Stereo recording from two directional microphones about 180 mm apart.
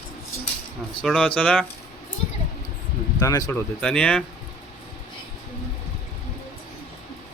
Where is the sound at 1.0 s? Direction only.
5° left (ahead or behind).